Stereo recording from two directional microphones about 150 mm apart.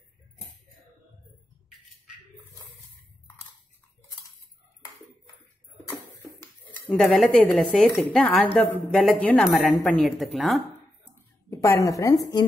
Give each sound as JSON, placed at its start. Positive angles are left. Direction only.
{"t": 6.9, "sound": "a woman's voice", "side_deg": 5}
{"t": 11.5, "sound": "a woman's voice", "side_deg": 20}